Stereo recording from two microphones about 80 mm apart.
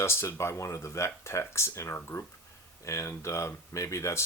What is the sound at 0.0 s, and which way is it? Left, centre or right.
Speech, left.